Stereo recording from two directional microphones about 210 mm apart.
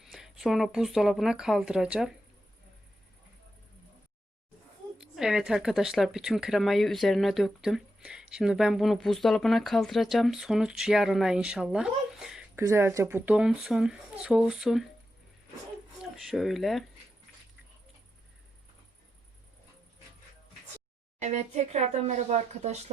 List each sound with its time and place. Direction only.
0.0 s speech: centre (ahead or behind)
4.9 s a woman's voice: 5° right (ahead or behind)
16.2 s a woman's voice: centre (ahead or behind)
21.2 s speech: 35° right (ahead or behind)